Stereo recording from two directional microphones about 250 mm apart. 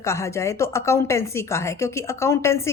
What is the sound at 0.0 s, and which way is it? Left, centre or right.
Speech, centre.